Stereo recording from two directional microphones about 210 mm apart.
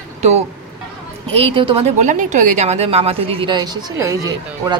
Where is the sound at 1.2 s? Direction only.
25° right (ahead or behind).